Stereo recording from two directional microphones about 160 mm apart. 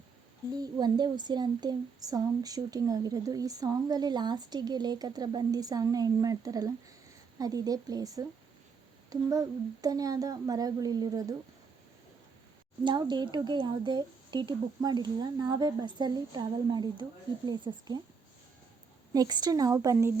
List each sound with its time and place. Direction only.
0.6 s speech: 25° right (ahead or behind)
12.8 s speech: 30° right (ahead or behind)
19.1 s speech: 25° right (ahead or behind)